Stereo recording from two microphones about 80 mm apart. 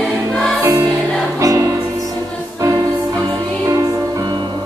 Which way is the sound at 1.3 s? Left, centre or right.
Right.